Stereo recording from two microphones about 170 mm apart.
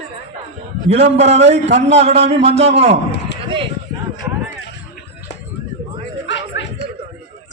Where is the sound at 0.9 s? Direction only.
40° right (ahead or behind).